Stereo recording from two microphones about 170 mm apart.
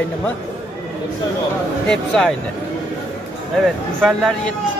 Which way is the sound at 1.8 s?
5° left (ahead or behind).